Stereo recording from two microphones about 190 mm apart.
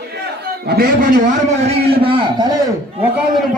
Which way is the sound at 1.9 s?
30° right (ahead or behind).